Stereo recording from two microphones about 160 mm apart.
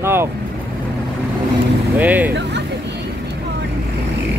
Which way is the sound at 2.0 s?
10° right (ahead or behind).